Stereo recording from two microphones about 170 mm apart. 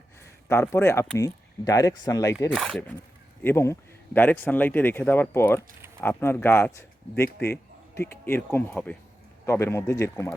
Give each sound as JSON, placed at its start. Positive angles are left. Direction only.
{"t": 0.4, "sound": "speech", "side_deg": 15}
{"t": 2.5, "sound": "speech", "side_deg": 0}
{"t": 3.4, "sound": "speech", "side_deg": 15}